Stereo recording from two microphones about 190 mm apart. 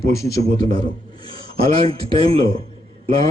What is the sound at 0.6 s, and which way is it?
A man's voice, 30° right (ahead or behind).